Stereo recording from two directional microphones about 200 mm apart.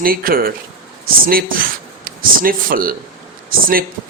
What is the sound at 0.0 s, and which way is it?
Speech, 45° right (ahead or behind).